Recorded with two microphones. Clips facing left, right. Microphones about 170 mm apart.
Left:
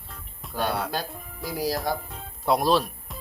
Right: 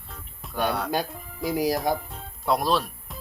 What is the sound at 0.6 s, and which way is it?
Speech, centre (ahead or behind).